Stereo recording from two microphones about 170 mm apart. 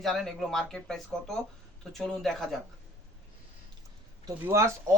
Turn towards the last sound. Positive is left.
turn(degrees=-15)  # may be behind; listen again after turning